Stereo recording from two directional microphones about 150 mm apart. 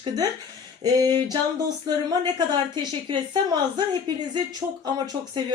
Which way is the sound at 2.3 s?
30° right (ahead or behind).